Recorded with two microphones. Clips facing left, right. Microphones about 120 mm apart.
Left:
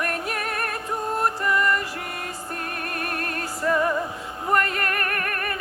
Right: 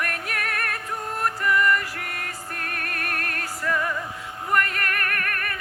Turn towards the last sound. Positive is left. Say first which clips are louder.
# left 2 dB
turn(degrees=30)  # may be behind; listen again after turning